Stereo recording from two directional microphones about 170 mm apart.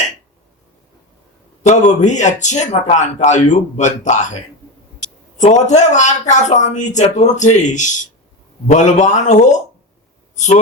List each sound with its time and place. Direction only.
1.6 s a man's voice: 45° left (ahead or behind)